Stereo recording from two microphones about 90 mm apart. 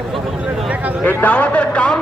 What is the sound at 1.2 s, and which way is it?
Speech, 15° left (ahead or behind).